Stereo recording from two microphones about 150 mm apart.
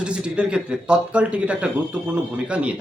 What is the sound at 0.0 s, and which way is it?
A man's voice, 5° right (ahead or behind).